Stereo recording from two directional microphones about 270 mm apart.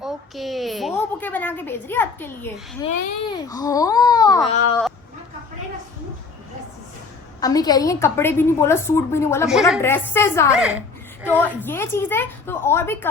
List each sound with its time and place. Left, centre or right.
0.0 s a woman's voice: centre
2.8 s a child's voice: left
3.2 s a woman's voice: centre
7.4 s a woman's voice: centre
9.5 s a woman's voice: centre
9.8 s a woman's voice: centre
10.5 s chuckle: centre
11.3 s a woman's voice: centre